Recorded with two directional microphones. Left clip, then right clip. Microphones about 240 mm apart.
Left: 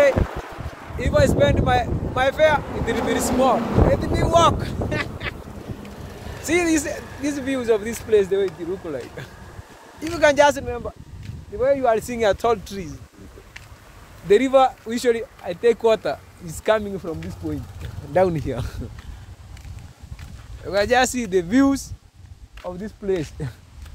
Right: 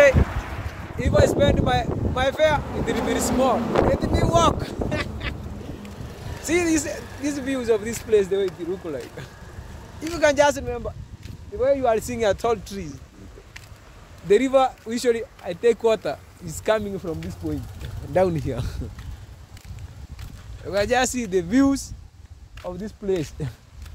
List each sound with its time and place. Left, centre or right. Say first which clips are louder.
0.5 s a sound: even; left
1.0 s speech: left 1 dB; centre
6.4 s speech: left 2 dB; centre
7.0 s a sound: left 2 dB; right
7.2 s speech: left 2 dB; centre
14.2 s speech: left 2 dB; centre
20.6 s speech: left 3 dB; centre